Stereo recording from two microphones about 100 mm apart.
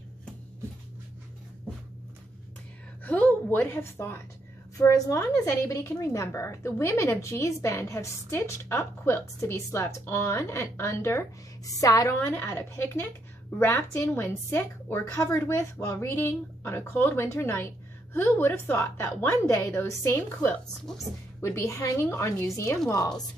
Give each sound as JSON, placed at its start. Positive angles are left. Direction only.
{"t": 3.0, "sound": "a woman's voice", "side_deg": 15}
{"t": 4.7, "sound": "a woman's voice", "side_deg": 35}